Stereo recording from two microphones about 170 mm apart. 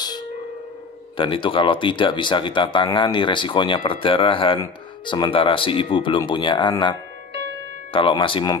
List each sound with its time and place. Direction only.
1.1 s speech: 30° left (ahead or behind)
7.9 s speech: 30° left (ahead or behind)